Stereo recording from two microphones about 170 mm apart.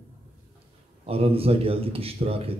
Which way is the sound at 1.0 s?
35° right (ahead or behind).